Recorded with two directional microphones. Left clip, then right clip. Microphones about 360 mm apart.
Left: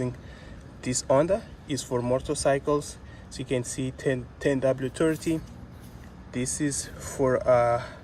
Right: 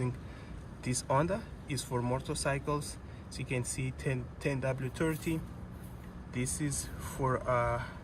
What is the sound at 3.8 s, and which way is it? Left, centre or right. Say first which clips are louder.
Speech: left 8 dB; left.